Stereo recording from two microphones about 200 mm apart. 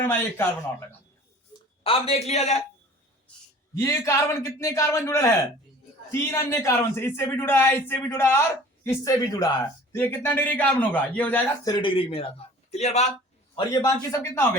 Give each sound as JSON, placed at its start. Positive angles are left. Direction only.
{"t": 0.0, "sound": "a man's voice", "side_deg": 10}
{"t": 1.8, "sound": "a man's voice", "side_deg": 30}
{"t": 3.8, "sound": "a man's voice", "side_deg": 15}
{"t": 11.7, "sound": "a man's voice", "side_deg": 25}
{"t": 13.6, "sound": "a man's voice", "side_deg": 15}